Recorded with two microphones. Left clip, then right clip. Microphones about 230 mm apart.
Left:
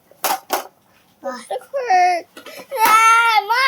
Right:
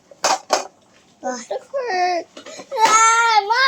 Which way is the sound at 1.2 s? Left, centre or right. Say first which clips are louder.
Right 2 dB; centre.